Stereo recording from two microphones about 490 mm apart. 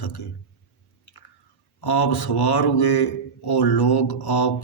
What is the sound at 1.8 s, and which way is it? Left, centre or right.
Mantra, left.